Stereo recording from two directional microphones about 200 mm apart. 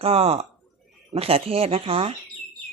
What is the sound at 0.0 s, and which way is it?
Speech, 30° right (ahead or behind).